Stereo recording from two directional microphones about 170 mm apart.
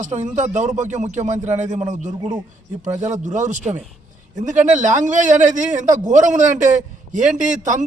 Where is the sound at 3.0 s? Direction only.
45° right (ahead or behind).